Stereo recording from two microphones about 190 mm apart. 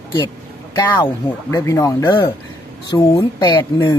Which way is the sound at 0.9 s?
10° left (ahead or behind).